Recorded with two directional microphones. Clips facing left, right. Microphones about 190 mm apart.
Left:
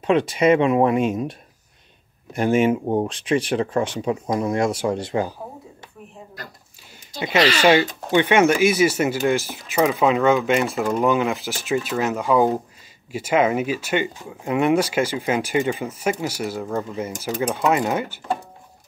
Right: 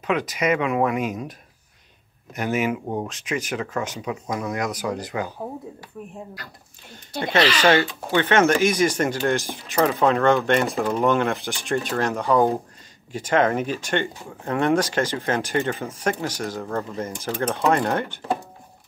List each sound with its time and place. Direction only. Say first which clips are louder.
0.0 s speech: left 6 dB; 30° left (ahead or behind)
2.3 s speech: left 6 dB; 30° left (ahead or behind)
7.2 s speech: left 1 dB; 10° left (ahead or behind)